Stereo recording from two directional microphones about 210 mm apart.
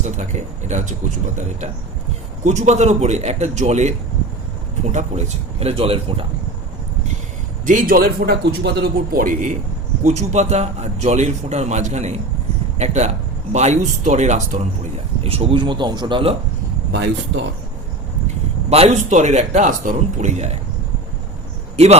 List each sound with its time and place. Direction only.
0.0 s a man's voice: 35° right (ahead or behind)
2.4 s a man's voice: 35° right (ahead or behind)
7.6 s a man's voice: 40° right (ahead or behind)
16.9 s speech: 55° right (ahead or behind)
18.7 s a man's voice: 30° right (ahead or behind)